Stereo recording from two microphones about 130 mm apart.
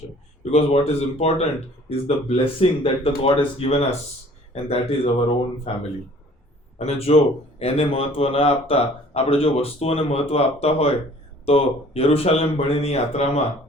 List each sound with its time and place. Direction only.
0.5 s speech: 55° left (ahead or behind)